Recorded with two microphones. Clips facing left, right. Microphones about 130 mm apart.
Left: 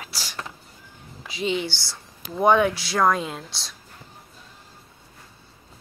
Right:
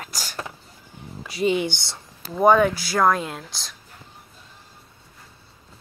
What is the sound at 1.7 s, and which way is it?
Speech, 20° right (ahead or behind).